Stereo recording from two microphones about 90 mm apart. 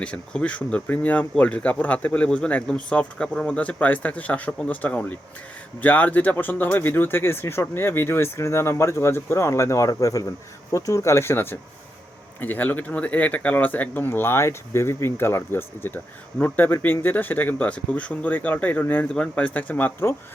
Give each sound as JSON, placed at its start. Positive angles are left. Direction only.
{"t": 0.0, "sound": "speech", "side_deg": 15}